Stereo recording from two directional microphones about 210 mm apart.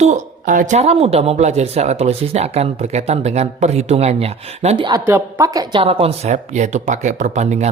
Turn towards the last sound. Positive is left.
turn(degrees=-35)  # may be behind; listen again after turning